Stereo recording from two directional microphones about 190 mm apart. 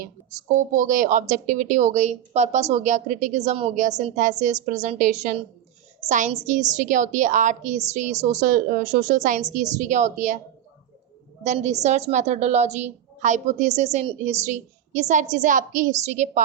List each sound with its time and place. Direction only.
0.5 s a woman's voice: 40° right (ahead or behind)
11.4 s a woman's voice: 35° right (ahead or behind)